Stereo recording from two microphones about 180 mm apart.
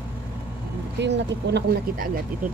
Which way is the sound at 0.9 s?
75° right (ahead or behind).